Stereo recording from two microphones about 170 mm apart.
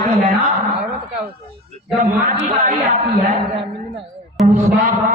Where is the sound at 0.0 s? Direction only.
45° right (ahead or behind).